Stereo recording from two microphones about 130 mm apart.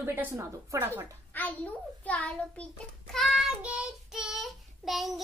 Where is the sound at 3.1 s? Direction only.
Centre (ahead or behind).